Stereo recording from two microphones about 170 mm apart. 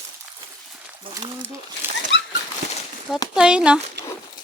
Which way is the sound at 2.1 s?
90° left.